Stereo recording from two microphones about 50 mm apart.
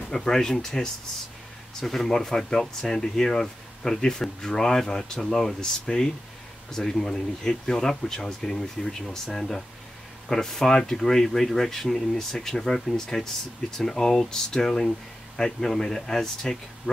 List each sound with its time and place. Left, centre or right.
0.1 s speech: centre